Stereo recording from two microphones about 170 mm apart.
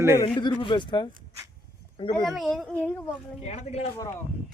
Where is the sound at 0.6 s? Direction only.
30° left (ahead or behind).